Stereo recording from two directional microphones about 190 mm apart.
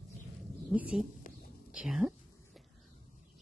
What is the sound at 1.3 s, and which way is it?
Whispering, 50° left (ahead or behind).